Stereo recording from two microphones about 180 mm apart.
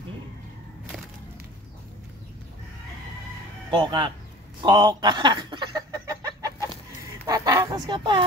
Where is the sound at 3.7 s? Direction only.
25° right (ahead or behind).